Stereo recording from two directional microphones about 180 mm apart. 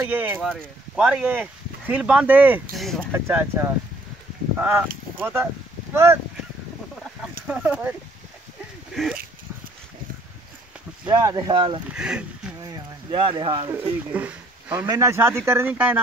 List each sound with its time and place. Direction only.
0.0 s speech: 10° right (ahead or behind)
2.7 s speech: centre (ahead or behind)
3.1 s speech: 15° right (ahead or behind)
7.4 s speech: 5° right (ahead or behind)
8.9 s speech: centre (ahead or behind)
11.1 s speech: 20° right (ahead or behind)
11.9 s speech: 5° right (ahead or behind)
12.6 s speech: 25° right (ahead or behind)
13.7 s speech: 10° right (ahead or behind)